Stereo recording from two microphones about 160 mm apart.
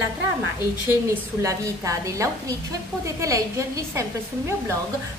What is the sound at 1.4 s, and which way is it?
A woman's voice, 20° right (ahead or behind).